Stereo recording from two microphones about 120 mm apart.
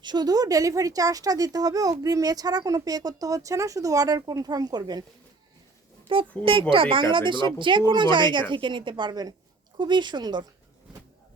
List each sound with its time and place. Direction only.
0.0 s speech: 35° right (ahead or behind)
6.1 s speech: 45° right (ahead or behind)